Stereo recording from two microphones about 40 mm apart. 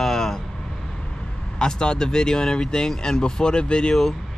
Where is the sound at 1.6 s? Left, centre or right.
Centre.